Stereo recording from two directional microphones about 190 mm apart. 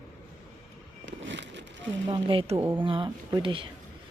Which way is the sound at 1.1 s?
70° right (ahead or behind).